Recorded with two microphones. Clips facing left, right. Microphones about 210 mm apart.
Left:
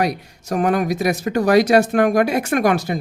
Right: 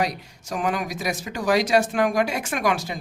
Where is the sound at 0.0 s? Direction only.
60° left (ahead or behind).